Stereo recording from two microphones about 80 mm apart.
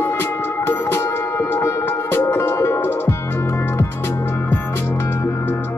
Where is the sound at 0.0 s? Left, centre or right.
Left.